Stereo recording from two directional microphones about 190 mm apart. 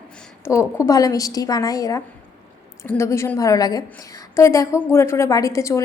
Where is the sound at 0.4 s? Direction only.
15° left (ahead or behind).